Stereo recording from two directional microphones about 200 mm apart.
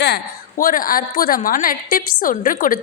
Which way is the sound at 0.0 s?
50° left (ahead or behind).